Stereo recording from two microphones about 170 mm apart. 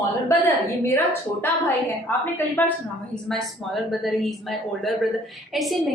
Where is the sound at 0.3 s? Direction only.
20° left (ahead or behind).